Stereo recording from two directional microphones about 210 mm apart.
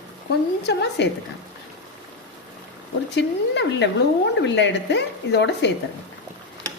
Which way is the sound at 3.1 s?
55° left (ahead or behind).